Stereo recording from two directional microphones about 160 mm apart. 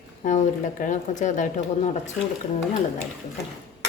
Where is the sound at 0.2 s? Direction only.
50° left (ahead or behind).